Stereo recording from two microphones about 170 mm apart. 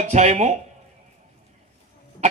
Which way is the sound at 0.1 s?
40° right (ahead or behind).